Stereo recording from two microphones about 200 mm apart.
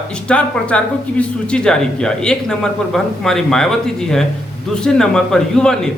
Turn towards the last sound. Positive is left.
turn(degrees=5)  # may be behind; listen again after turning